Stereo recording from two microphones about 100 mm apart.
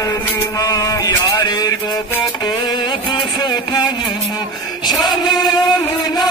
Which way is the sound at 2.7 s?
50° left (ahead or behind).